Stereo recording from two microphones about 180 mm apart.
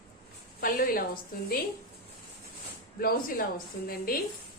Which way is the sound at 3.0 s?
55° left (ahead or behind).